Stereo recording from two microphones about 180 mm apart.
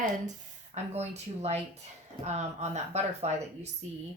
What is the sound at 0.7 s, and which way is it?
A woman's voice, 35° right (ahead or behind).